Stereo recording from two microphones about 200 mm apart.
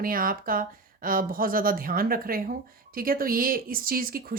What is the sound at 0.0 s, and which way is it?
Speech, 45° right (ahead or behind).